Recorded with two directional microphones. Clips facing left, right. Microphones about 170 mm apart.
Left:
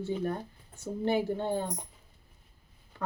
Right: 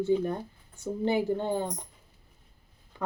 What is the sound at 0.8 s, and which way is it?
Speech, 15° right (ahead or behind).